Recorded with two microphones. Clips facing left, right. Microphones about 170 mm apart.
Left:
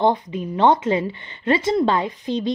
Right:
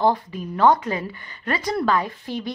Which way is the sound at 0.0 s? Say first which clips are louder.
Left 2 dB; 20° left (ahead or behind).